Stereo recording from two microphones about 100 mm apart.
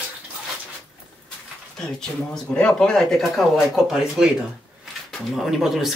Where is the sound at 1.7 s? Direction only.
5° left (ahead or behind).